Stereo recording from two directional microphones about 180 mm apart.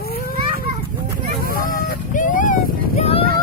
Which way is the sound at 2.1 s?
45° left (ahead or behind).